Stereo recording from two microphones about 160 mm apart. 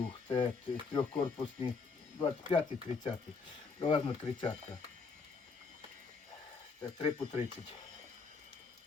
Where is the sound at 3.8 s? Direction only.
30° left (ahead or behind).